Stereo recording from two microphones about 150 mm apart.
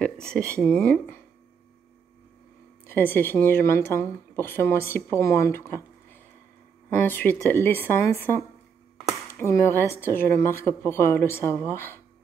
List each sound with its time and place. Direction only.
0.5 s speech: 5° left (ahead or behind)
2.9 s speech: 15° left (ahead or behind)